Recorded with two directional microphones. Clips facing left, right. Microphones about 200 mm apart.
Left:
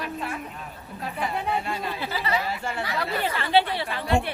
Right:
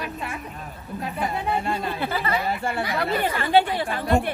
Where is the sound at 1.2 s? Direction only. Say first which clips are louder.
Right 2 dB; 50° right (ahead or behind).